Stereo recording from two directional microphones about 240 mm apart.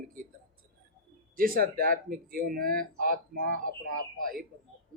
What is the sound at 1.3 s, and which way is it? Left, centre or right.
Speech, right.